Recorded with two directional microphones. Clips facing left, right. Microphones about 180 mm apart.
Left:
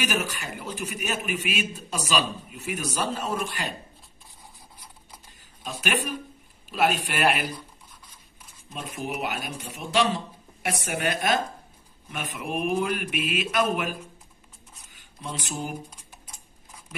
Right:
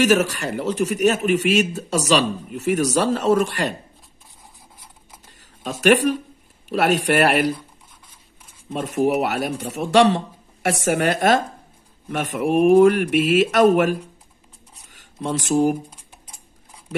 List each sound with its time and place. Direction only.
0.0 s a man's voice: 85° right
5.8 s a man's voice: 90° right
9.0 s a man's voice: 75° right (ahead or behind)
12.5 s speech: 50° right (ahead or behind)
12.9 s a man's voice: 75° right (ahead or behind)
14.9 s a sound: 90° right